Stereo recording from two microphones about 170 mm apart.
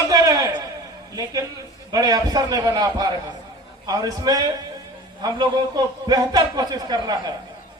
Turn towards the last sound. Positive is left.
turn(degrees=-25)  # may be behind; listen again after turning